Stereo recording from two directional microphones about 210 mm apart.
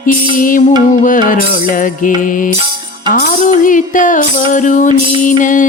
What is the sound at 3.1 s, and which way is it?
Music, 40° left (ahead or behind).